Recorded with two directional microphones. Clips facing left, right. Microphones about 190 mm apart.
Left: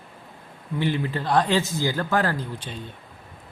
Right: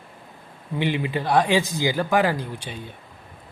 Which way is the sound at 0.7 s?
15° right (ahead or behind).